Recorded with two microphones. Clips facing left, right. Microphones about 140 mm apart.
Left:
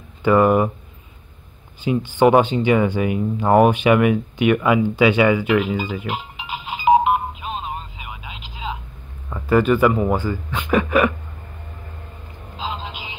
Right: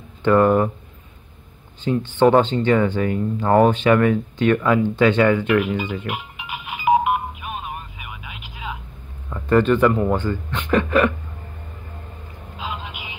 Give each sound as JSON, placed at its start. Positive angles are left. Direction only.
{"t": 0.2, "sound": "speech", "side_deg": 5}
{"t": 1.9, "sound": "speech", "side_deg": 10}
{"t": 6.0, "sound": "a sound", "side_deg": 25}
{"t": 9.3, "sound": "speech", "side_deg": 5}
{"t": 12.5, "sound": "music", "side_deg": 25}